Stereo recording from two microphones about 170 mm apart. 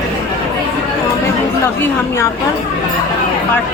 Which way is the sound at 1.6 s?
15° left (ahead or behind).